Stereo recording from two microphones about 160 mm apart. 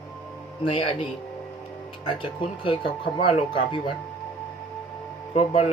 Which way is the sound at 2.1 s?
30° left (ahead or behind).